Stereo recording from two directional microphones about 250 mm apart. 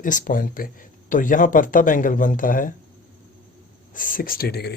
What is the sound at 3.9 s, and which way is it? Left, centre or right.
Speech, left.